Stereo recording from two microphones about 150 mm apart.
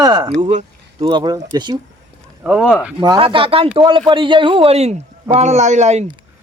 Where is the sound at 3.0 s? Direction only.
30° right (ahead or behind); by 6.1 s 50° right (ahead or behind).